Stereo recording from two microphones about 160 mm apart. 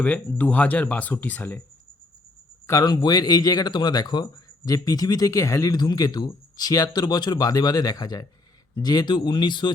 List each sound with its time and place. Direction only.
0.0 s speech: 10° left (ahead or behind)
2.6 s a man's voice: 25° left (ahead or behind)